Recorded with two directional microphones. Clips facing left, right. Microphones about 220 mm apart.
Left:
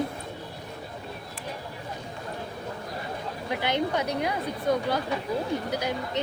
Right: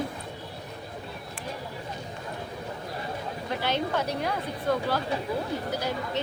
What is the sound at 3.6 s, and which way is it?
A woman's voice, 15° left (ahead or behind).